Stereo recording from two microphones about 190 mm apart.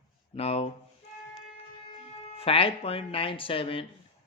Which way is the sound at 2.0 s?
30° left (ahead or behind).